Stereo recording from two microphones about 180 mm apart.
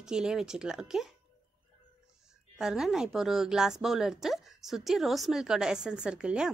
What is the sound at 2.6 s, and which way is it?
Speech, 5° right (ahead or behind).